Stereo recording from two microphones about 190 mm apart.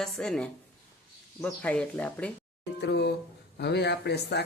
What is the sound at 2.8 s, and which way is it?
Speech, 65° left (ahead or behind).